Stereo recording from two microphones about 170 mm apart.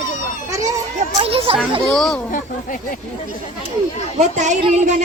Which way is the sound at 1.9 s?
5° left (ahead or behind).